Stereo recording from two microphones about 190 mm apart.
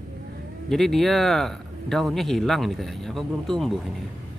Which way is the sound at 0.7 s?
Centre (ahead or behind).